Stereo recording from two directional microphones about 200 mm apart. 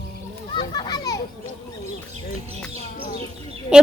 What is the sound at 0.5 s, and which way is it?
Children playing, 20° left (ahead or behind).